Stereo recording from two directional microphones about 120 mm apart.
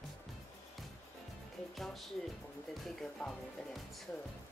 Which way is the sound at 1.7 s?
Centre (ahead or behind).